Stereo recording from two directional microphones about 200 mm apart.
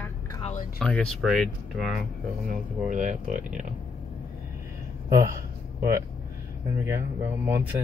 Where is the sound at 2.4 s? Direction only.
40° right (ahead or behind).